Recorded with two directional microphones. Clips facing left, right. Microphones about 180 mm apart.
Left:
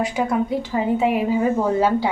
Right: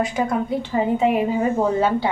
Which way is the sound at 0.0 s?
5° left (ahead or behind).